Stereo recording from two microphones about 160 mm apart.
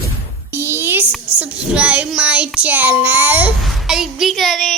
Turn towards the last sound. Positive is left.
turn(degrees=0)  # may be behind; listen again after turning